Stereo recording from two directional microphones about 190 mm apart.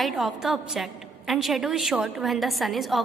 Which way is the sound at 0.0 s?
Centre (ahead or behind).